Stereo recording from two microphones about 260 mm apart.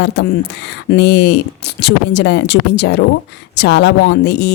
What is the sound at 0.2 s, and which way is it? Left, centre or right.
Speech, left.